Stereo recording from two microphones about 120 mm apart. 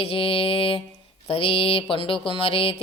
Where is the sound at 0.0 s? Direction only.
50° left (ahead or behind).